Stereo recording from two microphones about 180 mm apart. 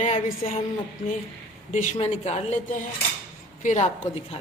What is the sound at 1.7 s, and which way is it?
A woman's voice, 45° left (ahead or behind).